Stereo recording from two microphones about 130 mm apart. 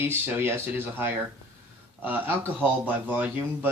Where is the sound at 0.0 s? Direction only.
20° right (ahead or behind).